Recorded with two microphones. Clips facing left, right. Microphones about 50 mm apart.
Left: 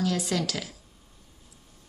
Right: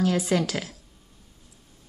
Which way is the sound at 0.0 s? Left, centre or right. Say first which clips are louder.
Right 4 dB; right.